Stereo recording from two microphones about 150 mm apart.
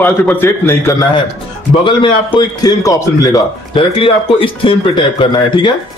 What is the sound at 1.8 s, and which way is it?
Speech, 35° left (ahead or behind).